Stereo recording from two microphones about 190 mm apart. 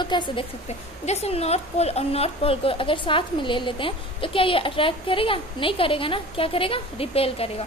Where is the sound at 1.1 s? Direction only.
35° left (ahead or behind).